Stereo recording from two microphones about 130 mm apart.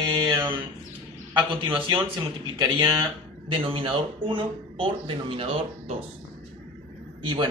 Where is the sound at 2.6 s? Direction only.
35° right (ahead or behind).